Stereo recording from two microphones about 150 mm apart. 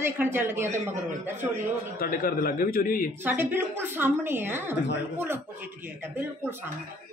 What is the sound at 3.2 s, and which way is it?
Speech, 15° right (ahead or behind).